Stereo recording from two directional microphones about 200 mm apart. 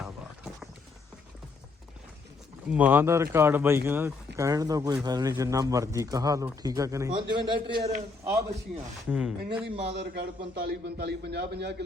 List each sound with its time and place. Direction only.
0.0 s a sound: centre (ahead or behind)
2.6 s a man's voice: 5° right (ahead or behind)
9.0 s speech: 5° right (ahead or behind)
9.8 s a man's voice: 60° right (ahead or behind)